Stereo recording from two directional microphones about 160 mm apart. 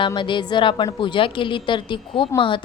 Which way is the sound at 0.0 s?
30° left (ahead or behind).